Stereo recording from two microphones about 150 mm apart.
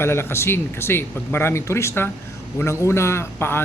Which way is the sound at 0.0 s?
15° left (ahead or behind).